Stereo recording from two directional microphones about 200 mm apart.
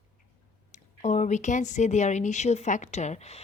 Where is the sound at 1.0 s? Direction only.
35° left (ahead or behind).